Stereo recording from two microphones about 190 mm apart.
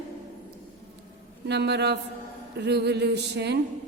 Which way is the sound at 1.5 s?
60° right (ahead or behind).